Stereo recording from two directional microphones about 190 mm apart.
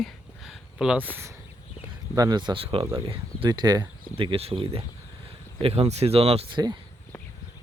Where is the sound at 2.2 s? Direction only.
20° right (ahead or behind).